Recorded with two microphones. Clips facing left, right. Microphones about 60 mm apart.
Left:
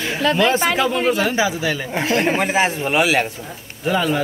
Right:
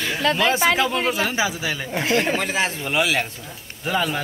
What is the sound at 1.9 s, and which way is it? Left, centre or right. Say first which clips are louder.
Speech: left 1 dB; left.